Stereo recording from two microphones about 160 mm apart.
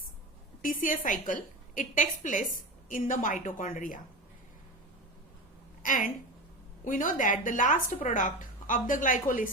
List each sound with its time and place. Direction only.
0.6 s speech: 55° left (ahead or behind)
5.8 s a woman's voice: 55° left (ahead or behind)